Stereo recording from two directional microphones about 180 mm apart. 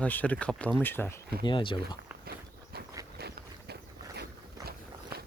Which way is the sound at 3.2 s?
65° right (ahead or behind).